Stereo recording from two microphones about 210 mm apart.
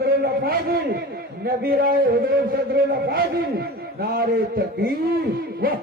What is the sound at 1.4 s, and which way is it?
A man's voice, 45° right (ahead or behind).